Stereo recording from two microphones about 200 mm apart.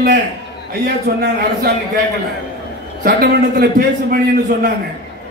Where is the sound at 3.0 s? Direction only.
55° right (ahead or behind).